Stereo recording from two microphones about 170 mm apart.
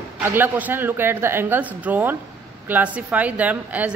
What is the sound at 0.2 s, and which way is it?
A woman's voice, 10° right (ahead or behind).